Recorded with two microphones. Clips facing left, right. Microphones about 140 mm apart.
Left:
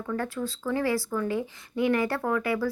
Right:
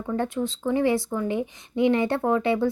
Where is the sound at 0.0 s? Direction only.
25° right (ahead or behind).